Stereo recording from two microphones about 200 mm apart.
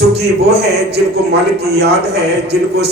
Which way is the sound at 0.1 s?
55° right (ahead or behind).